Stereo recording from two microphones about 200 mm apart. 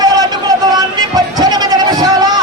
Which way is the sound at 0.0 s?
20° right (ahead or behind).